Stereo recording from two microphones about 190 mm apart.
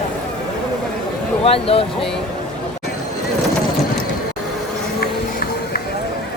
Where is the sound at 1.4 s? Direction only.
30° left (ahead or behind).